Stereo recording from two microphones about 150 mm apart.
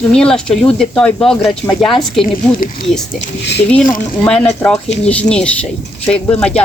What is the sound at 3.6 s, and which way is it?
Speech, 5° left (ahead or behind).